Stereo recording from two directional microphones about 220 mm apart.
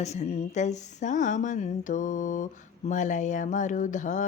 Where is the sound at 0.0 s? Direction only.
30° left (ahead or behind).